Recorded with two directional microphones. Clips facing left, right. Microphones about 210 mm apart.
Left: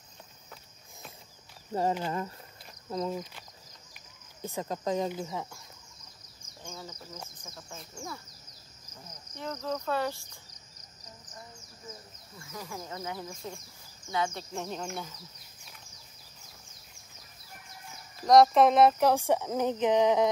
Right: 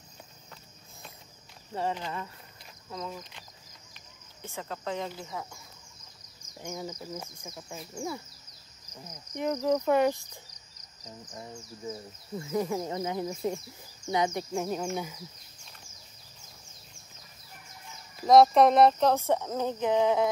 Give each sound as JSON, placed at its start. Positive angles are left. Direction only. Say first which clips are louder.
{"t": 1.7, "sound": "speech", "louder": "left 3 dB", "side_deg": 40}
{"t": 4.4, "sound": "speech", "louder": "left 4 dB", "side_deg": 35}
{"t": 5.0, "sound": "speech", "louder": "left 4 dB", "side_deg": 15}
{"t": 6.6, "sound": "cricket", "louder": "right 7 dB", "side_deg": -15}
{"t": 7.9, "sound": "speech", "louder": "right 7 dB", "side_deg": -20}
{"t": 9.3, "sound": "cricket", "louder": "right 8 dB", "side_deg": -15}
{"t": 12.4, "sound": "speech", "louder": "right 12 dB", "side_deg": -25}
{"t": 14.1, "sound": "cricket", "louder": "right 4 dB", "side_deg": -15}
{"t": 18.2, "sound": "speech", "louder": "right 1 dB", "side_deg": 0}